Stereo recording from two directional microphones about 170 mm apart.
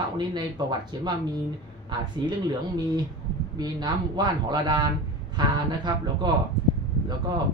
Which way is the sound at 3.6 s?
25° right (ahead or behind).